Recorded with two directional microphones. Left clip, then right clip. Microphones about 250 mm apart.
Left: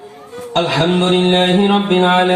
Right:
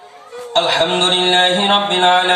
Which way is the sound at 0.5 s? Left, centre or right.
Right.